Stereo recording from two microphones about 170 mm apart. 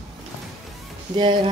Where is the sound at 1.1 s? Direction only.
25° right (ahead or behind).